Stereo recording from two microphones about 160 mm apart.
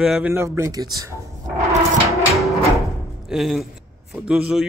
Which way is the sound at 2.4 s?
Centre (ahead or behind).